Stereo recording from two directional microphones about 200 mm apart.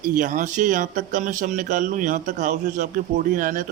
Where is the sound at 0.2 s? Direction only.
40° right (ahead or behind).